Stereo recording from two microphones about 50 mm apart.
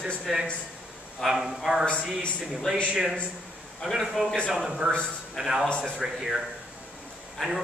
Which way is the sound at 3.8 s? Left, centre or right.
Centre.